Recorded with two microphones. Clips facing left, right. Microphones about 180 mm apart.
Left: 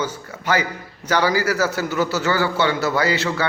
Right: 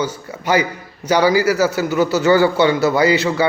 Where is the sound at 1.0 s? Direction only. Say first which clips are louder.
Right 5 dB; 15° right (ahead or behind).